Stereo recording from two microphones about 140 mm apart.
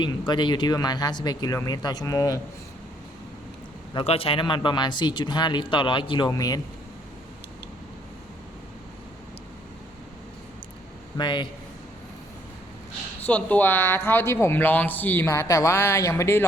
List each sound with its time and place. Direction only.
0.0 s speech: 35° left (ahead or behind)
3.9 s speech: 45° left (ahead or behind); by 6.6 s 25° left (ahead or behind)
11.2 s speech: 35° left (ahead or behind)
13.2 s speech: 10° left (ahead or behind)